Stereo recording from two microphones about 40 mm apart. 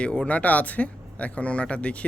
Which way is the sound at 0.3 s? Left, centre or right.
Left.